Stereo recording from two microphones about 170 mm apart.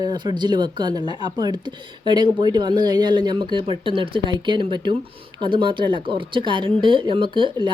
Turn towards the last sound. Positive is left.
turn(degrees=-30)  # may be behind; listen again after turning